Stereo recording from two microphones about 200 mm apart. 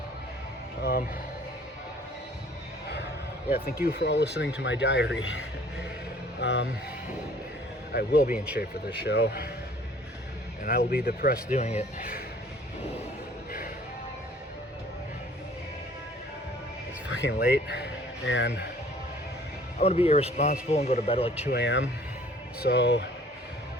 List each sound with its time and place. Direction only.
0.8 s music: 55° left (ahead or behind)
3.5 s speech: 50° left (ahead or behind)
6.4 s speech: 60° left (ahead or behind)
7.9 s speech: 50° left (ahead or behind)
8.3 s speech: 5° right (ahead or behind)
9.0 s speech: 55° left (ahead or behind)
10.6 s speech: 45° left (ahead or behind)
11.5 s a man's voice: 35° left (ahead or behind)
17.1 s speech: 65° left (ahead or behind)
18.3 s speech: 70° left (ahead or behind)
19.8 s a man's voice: 30° left (ahead or behind)
21.5 s speech: 65° left (ahead or behind)